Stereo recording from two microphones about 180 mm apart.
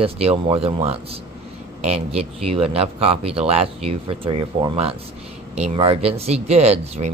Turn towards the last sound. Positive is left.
turn(degrees=-35)  # may be behind; listen again after turning